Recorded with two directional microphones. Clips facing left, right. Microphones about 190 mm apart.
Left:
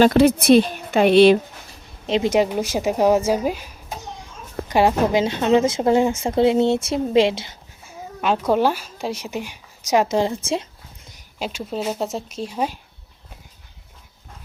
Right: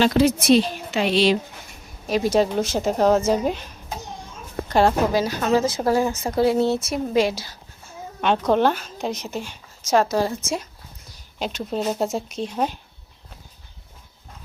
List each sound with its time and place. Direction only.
0.0 s a woman's voice: 60° left (ahead or behind)
1.7 s a woman's voice: 25° left (ahead or behind)
5.2 s a woman's voice: 25° left (ahead or behind)
8.2 s a woman's voice: 5° left (ahead or behind); by 10.7 s 25° left (ahead or behind)
11.3 s speech: 5° left (ahead or behind)